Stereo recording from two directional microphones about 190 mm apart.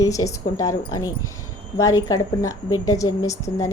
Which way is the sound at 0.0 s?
15° left (ahead or behind).